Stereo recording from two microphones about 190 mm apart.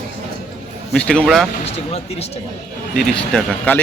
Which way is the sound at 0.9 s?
5° left (ahead or behind).